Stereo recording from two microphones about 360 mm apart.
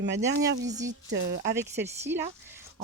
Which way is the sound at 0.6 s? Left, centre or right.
Centre.